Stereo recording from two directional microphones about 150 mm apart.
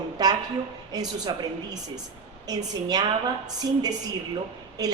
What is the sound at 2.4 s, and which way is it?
A woman's voice, 25° right (ahead or behind).